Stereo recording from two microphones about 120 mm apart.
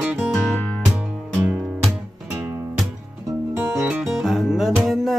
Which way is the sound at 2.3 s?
20° right (ahead or behind).